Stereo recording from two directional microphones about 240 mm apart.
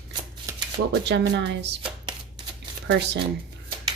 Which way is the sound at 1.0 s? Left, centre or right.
Right.